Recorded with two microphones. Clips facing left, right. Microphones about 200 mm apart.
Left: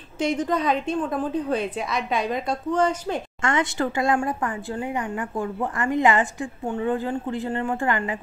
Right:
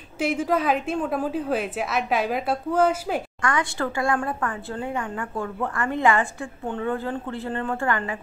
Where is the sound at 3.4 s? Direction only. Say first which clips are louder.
Left 4 dB; 20° left (ahead or behind).